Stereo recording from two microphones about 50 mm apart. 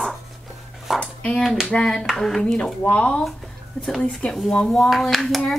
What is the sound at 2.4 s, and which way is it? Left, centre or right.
Speech, centre.